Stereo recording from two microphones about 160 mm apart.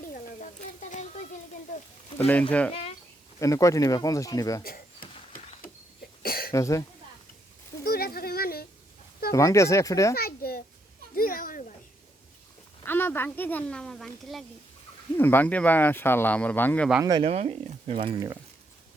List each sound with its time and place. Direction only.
0.0 s frying: 55° left (ahead or behind)
2.1 s speech: 10° left (ahead or behind)
3.4 s speech: 20° left (ahead or behind)
4.6 s a sound: 65° left (ahead or behind)
6.2 s cough: 65° left (ahead or behind)
6.5 s speech: 20° left (ahead or behind)
7.9 s a sound: 70° left (ahead or behind)
9.3 s speech: 20° left (ahead or behind)
10.2 s a sound: 70° left (ahead or behind)
12.8 s a woman's voice: 15° left (ahead or behind)
15.2 s speech: 10° left (ahead or behind)
17.0 s speech: 25° right (ahead or behind)
17.2 s speech: 40° right (ahead or behind)